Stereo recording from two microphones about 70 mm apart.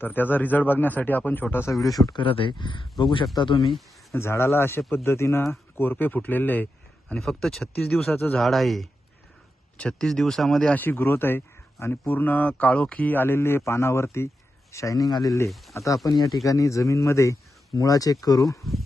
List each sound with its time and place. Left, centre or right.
0.0 s speech: left
2.1 s speech: left
4.1 s a man's voice: left
7.2 s speech: centre
10.0 s speech: centre
10.7 s a man's voice: left
15.7 s speech: left
17.7 s speech: left